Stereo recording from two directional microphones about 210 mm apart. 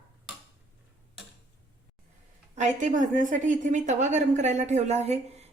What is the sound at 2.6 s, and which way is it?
A woman's voice, 35° right (ahead or behind).